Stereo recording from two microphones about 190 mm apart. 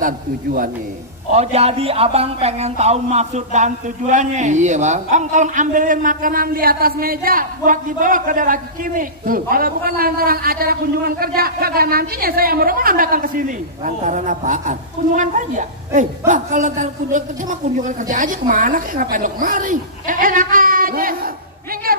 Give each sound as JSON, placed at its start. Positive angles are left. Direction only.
{"t": 1.3, "sound": "a woman's voice", "side_deg": -35}